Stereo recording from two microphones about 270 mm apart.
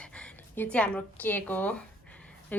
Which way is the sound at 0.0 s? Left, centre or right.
Centre.